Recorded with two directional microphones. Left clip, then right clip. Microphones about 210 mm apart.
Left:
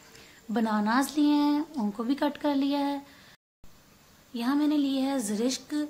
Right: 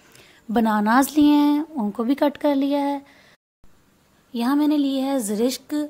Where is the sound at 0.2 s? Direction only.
35° right (ahead or behind).